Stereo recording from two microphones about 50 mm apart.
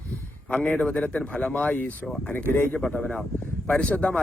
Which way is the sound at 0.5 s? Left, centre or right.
Left.